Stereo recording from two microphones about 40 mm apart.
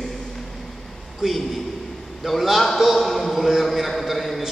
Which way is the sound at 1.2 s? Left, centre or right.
Centre.